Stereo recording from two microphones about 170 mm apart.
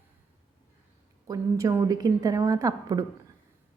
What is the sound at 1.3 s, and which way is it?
A woman's voice, 20° right (ahead or behind).